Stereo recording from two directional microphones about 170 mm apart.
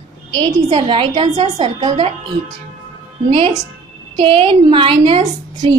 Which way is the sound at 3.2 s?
35° right (ahead or behind).